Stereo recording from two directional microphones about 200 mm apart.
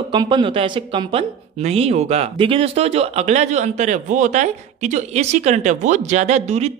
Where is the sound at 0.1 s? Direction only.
25° right (ahead or behind).